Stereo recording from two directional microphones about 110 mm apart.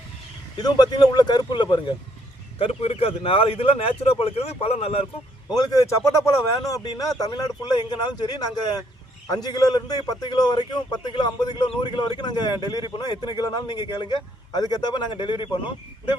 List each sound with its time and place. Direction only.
0.5 s a man's voice: 40° left (ahead or behind)
2.6 s a man's voice: 60° left (ahead or behind)
5.5 s a man's voice: 40° left (ahead or behind)